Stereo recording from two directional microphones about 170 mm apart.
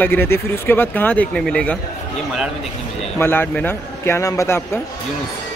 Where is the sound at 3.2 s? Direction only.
10° left (ahead or behind).